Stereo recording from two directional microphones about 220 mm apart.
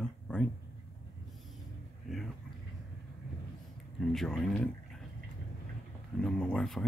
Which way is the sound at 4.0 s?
Centre (ahead or behind).